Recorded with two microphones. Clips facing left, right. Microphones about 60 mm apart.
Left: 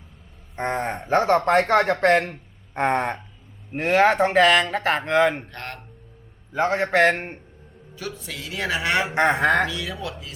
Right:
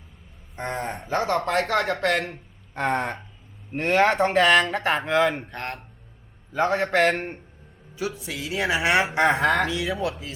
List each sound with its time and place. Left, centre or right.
0.5 s speech: left
2.7 s a sound: left
3.7 s speech: centre
5.5 s speech: centre
6.5 s a man's voice: centre
7.9 s speech: centre
9.2 s speech: centre
9.6 s speech: right